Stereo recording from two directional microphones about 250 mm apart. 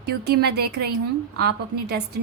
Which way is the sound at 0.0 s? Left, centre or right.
Right.